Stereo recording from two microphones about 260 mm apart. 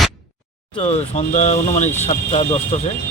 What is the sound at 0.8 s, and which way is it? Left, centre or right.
Speech, left.